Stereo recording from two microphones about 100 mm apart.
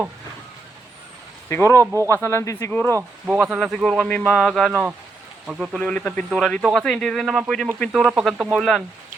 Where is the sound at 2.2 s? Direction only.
30° left (ahead or behind).